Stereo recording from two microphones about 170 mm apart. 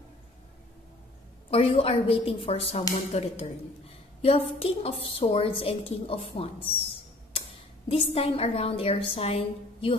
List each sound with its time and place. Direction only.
1.5 s a woman's voice: 35° left (ahead or behind)
7.9 s a woman's voice: 35° left (ahead or behind)